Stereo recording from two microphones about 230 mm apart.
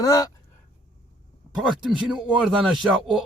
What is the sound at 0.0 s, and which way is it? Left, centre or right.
Speech, centre.